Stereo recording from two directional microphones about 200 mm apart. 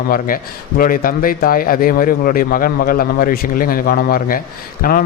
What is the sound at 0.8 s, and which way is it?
Speech, 45° left (ahead or behind).